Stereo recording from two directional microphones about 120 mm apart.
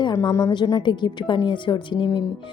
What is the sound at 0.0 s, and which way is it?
Speech, 30° left (ahead or behind).